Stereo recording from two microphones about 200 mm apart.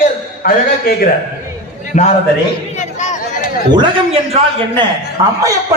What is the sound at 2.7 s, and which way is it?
Chatter, 35° left (ahead or behind).